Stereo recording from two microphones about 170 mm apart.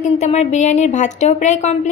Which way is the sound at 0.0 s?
40° left (ahead or behind).